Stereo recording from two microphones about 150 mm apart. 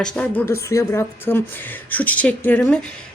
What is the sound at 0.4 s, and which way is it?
Speech, 20° left (ahead or behind).